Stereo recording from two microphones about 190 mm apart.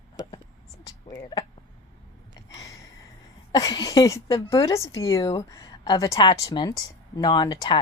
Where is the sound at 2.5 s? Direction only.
15° left (ahead or behind).